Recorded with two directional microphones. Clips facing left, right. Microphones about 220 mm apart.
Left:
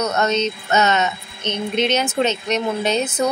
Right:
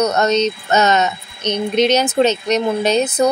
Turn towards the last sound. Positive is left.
turn(degrees=-40)  # may be behind; listen again after turning